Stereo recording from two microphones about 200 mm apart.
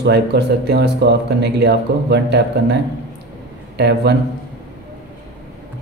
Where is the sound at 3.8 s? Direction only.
55° right (ahead or behind).